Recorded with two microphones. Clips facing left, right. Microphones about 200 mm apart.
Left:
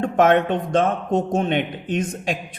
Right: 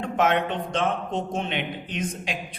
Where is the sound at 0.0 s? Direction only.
50° left (ahead or behind).